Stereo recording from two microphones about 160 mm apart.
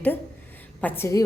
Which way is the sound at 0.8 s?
15° left (ahead or behind).